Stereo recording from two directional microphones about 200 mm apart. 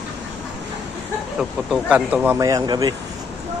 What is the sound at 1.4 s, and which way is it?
Speech, centre (ahead or behind).